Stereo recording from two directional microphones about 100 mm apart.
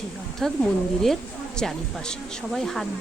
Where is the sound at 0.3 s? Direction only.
5° left (ahead or behind).